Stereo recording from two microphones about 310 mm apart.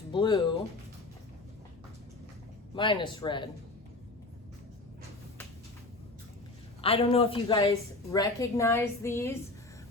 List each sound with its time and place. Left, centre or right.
0.1 s a woman's voice: centre
2.7 s a woman's voice: centre
6.8 s a woman's voice: centre